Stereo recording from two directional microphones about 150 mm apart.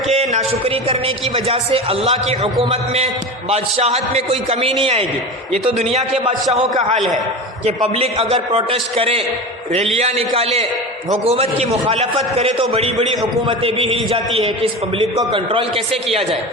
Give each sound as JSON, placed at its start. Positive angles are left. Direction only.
{"t": 0.1, "sound": "a man's voice", "side_deg": -45}
{"t": 7.6, "sound": "a man's voice", "side_deg": -40}
{"t": 15.1, "sound": "a man's voice", "side_deg": -30}